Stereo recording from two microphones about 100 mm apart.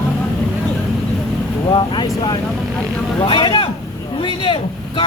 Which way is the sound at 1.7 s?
50° left (ahead or behind).